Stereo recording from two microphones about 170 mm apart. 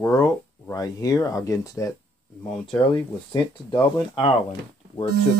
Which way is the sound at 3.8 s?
10° left (ahead or behind).